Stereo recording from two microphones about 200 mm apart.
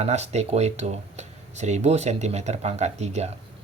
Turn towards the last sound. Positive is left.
turn(degrees=-35)  # may be behind; listen again after turning